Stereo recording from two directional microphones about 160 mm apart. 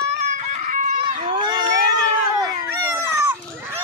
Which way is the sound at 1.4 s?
25° right (ahead or behind).